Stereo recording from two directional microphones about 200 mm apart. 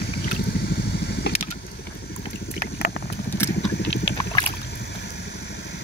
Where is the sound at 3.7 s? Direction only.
60° left (ahead or behind).